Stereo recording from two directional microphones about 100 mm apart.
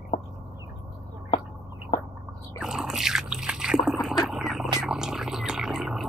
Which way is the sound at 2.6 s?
5° right (ahead or behind).